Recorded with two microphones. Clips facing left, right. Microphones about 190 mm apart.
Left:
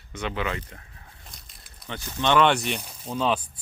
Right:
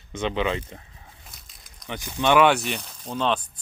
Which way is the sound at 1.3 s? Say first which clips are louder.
Left 1 dB; centre (ahead or behind).